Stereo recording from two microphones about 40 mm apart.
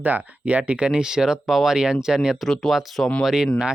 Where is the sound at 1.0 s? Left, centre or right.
Centre.